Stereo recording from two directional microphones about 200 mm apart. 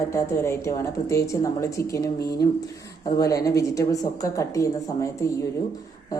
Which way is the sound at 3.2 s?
15° left (ahead or behind).